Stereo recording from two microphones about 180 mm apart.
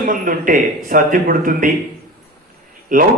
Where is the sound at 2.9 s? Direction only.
50° right (ahead or behind).